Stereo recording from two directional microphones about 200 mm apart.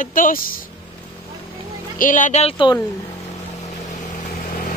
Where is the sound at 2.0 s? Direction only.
40° left (ahead or behind).